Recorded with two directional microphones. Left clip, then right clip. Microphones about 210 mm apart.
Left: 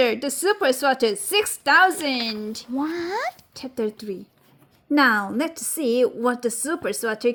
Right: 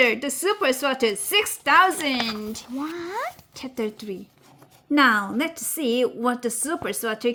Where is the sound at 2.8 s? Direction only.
30° left (ahead or behind).